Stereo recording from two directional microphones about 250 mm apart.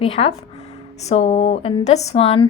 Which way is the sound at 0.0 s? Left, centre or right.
Left.